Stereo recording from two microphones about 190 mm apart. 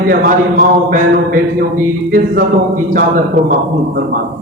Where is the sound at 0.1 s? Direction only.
50° right (ahead or behind).